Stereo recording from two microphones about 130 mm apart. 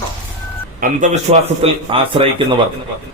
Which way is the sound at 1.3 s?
45° right (ahead or behind).